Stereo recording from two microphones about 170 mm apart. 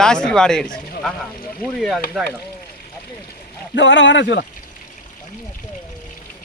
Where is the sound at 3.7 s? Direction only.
90° left.